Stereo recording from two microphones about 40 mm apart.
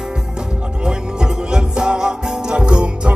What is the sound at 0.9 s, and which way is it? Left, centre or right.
Music, centre.